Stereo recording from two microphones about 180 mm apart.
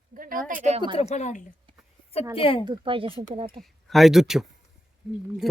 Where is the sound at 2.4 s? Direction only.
30° left (ahead or behind).